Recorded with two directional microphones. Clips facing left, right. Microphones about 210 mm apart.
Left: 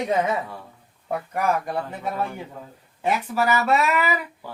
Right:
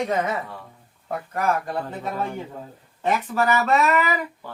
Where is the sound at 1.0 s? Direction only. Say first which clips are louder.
Even; 15° left (ahead or behind).